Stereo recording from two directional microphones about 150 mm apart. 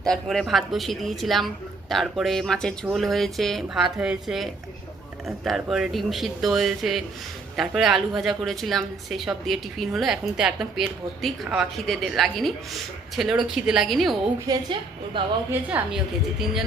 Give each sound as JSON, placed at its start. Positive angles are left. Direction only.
{"t": 0.0, "sound": "a woman's voice", "side_deg": 5}
{"t": 14.4, "sound": "a woman's voice", "side_deg": -30}
{"t": 15.4, "sound": "a woman's voice", "side_deg": -10}